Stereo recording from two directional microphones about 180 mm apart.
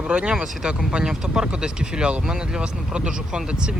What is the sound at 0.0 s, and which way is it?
Speech, 10° right (ahead or behind).